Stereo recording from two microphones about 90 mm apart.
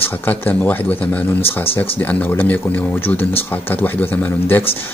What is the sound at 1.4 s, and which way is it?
Speech, 90° left.